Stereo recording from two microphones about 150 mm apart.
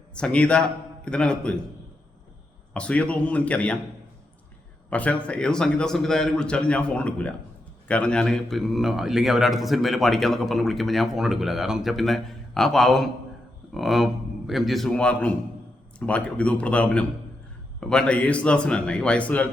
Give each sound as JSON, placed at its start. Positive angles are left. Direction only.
{"t": 0.1, "sound": "a man's voice", "side_deg": 5}
{"t": 2.7, "sound": "a man's voice", "side_deg": 10}
{"t": 4.9, "sound": "a man's voice", "side_deg": 10}